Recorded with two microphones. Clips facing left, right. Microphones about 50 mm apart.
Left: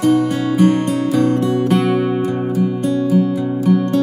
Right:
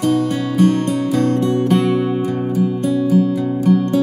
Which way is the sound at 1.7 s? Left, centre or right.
Centre.